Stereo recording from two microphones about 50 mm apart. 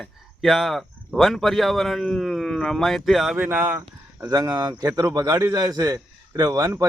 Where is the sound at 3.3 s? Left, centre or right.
Right.